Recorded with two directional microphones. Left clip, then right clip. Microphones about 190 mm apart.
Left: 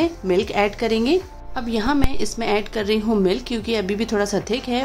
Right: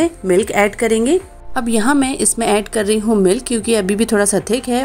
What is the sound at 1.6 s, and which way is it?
A woman's voice, 30° right (ahead or behind).